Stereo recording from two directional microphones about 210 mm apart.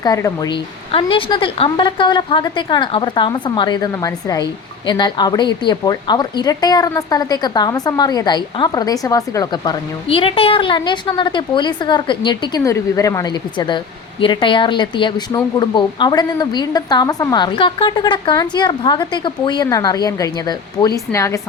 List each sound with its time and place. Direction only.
0.0 s a woman's voice: 15° left (ahead or behind)